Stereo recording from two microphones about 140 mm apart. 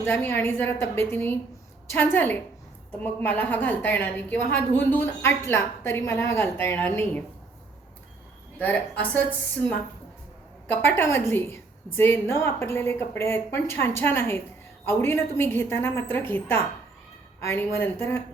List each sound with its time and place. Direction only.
0.0 s a woman's voice: 15° left (ahead or behind)
8.5 s a woman's voice: 10° left (ahead or behind)
9.6 s a woman's voice: 40° right (ahead or behind)
10.7 s a woman's voice: 15° left (ahead or behind)